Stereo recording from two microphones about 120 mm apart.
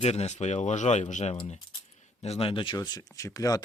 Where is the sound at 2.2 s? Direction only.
55° left (ahead or behind); by 3.6 s 30° left (ahead or behind).